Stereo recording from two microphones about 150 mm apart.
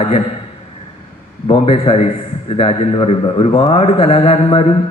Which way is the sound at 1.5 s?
40° left (ahead or behind).